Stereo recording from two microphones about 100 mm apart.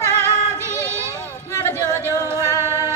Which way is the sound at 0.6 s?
30° right (ahead or behind).